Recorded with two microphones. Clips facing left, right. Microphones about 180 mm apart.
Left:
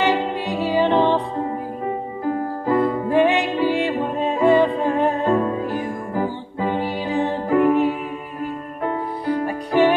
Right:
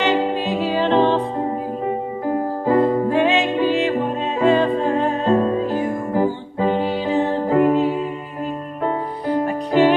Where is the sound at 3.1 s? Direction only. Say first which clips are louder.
Even; 15° left (ahead or behind).